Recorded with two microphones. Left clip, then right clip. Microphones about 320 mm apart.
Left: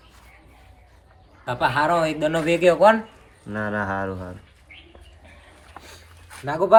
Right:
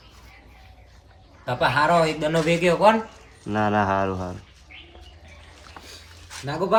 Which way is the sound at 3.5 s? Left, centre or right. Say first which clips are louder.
Right 5 dB; centre.